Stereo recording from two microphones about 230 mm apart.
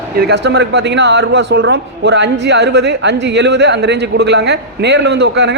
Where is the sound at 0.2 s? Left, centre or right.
Right.